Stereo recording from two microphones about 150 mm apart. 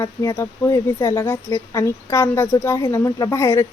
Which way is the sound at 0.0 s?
20° left (ahead or behind).